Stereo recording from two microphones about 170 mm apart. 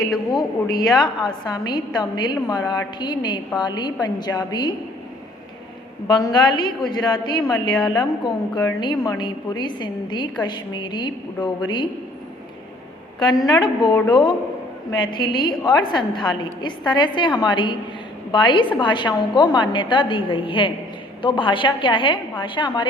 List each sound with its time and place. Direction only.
0.3 s a woman's voice: 25° left (ahead or behind)
6.1 s a woman's voice: 25° left (ahead or behind)
13.1 s a woman's voice: 20° left (ahead or behind)